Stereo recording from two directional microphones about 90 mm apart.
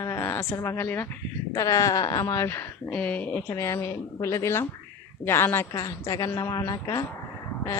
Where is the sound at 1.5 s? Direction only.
40° left (ahead or behind); by 3.4 s 20° left (ahead or behind).